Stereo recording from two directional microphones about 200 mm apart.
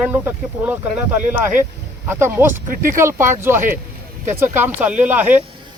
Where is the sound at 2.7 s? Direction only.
45° right (ahead or behind).